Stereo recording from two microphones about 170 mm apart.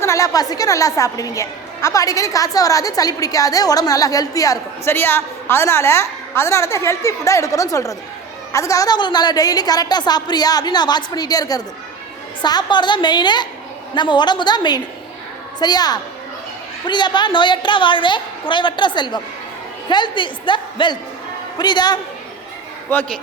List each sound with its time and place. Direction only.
0.0 s a woman's voice: 20° left (ahead or behind)